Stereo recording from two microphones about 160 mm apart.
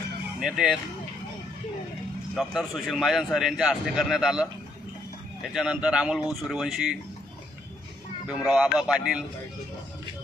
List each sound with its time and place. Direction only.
0.3 s speech: 5° right (ahead or behind)
2.3 s a man's voice: centre (ahead or behind)
8.3 s a man's voice: 5° right (ahead or behind)